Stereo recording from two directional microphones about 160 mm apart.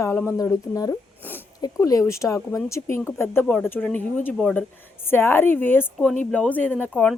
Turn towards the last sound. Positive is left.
turn(degrees=5)  # may be behind; listen again after turning